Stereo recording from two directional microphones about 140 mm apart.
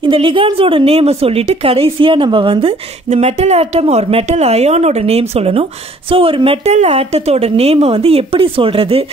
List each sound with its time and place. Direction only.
0.0 s a woman's voice: 35° right (ahead or behind)